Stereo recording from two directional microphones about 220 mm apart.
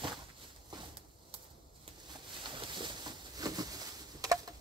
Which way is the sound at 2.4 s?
20° right (ahead or behind).